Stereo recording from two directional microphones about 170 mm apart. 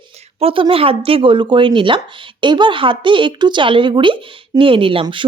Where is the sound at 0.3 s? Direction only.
35° right (ahead or behind).